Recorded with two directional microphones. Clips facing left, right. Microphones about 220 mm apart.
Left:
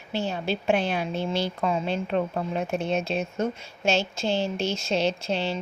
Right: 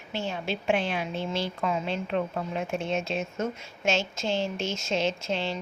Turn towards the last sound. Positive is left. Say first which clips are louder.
# left 3 dB
turn(degrees=35)  # may be behind; listen again after turning